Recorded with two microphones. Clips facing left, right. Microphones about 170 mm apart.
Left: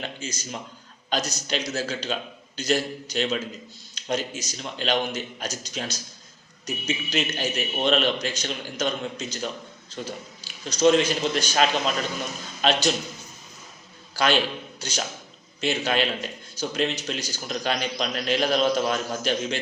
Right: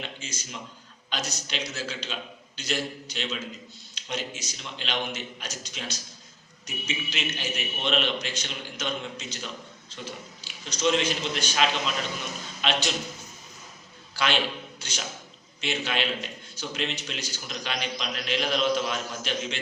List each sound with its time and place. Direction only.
0.0 s a man's voice: 40° left (ahead or behind)
14.2 s a man's voice: 40° left (ahead or behind)